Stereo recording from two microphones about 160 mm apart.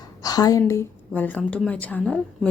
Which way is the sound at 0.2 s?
25° left (ahead or behind).